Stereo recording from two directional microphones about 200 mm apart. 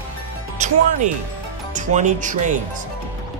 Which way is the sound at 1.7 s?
40° right (ahead or behind).